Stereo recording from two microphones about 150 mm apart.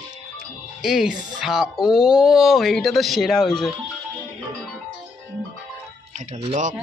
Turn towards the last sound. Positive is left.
turn(degrees=-55)  # may be behind; listen again after turning